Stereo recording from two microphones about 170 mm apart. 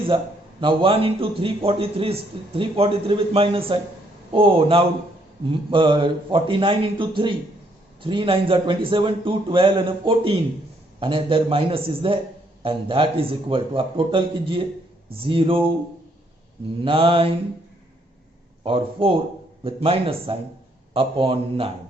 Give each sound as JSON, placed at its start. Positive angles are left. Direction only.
{"t": 0.6, "sound": "a man's voice", "side_deg": -30}
{"t": 16.8, "sound": "a man's voice", "side_deg": -30}
{"t": 18.6, "sound": "a man's voice", "side_deg": -30}